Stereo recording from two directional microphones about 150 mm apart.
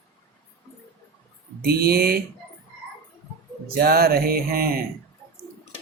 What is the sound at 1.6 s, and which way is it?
Speech, 90° right.